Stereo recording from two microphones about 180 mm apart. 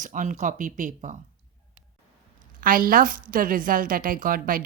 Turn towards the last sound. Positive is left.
turn(degrees=-50)  # may be behind; listen again after turning